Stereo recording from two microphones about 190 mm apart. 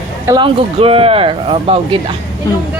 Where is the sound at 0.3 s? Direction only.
25° right (ahead or behind).